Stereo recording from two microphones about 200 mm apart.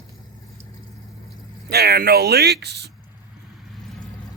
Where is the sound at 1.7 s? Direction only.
55° right (ahead or behind).